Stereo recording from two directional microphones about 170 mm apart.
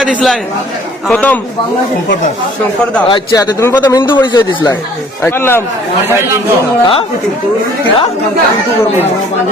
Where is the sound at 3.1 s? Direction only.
25° left (ahead or behind).